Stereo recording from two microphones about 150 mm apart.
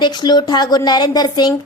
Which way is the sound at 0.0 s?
30° left (ahead or behind).